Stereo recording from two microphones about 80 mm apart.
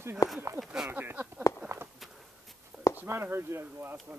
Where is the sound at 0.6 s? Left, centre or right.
Centre.